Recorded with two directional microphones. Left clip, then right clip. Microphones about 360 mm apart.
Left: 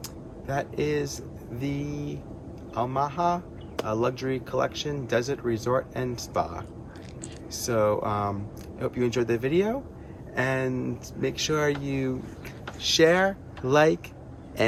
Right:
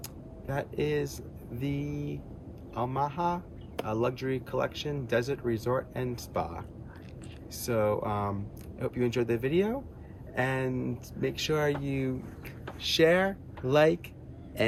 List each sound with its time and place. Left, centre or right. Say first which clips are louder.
0.4 s speech: left 4 dB; centre